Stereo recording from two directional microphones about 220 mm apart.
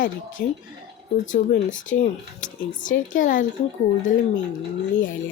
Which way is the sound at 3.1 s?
35° left (ahead or behind).